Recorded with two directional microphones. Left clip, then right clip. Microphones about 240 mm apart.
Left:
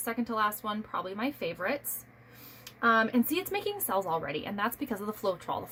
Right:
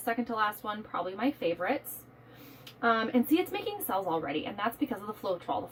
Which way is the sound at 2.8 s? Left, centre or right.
Left.